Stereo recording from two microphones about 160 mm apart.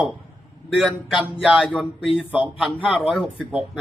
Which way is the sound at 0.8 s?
5° right (ahead or behind).